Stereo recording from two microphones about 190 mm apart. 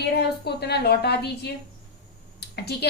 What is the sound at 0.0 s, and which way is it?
Speech, 60° left (ahead or behind).